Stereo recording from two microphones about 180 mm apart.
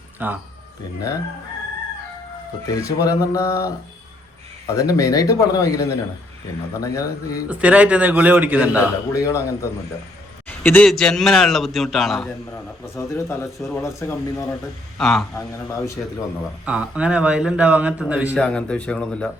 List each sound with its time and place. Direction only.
0.2 s a man's voice: 10° right (ahead or behind)
2.6 s speech: 15° left (ahead or behind)
7.5 s a man's voice: 10° right (ahead or behind)
9.1 s speech: 15° left (ahead or behind)
10.6 s a man's voice: 10° left (ahead or behind)
13.0 s speech: 15° left (ahead or behind)
14.9 s a man's voice: centre (ahead or behind)
15.4 s speech: 15° left (ahead or behind)
16.6 s a man's voice: 5° right (ahead or behind)
18.3 s a man's voice: 5° left (ahead or behind)